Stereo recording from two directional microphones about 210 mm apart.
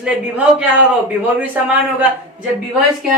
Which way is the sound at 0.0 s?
5° right (ahead or behind).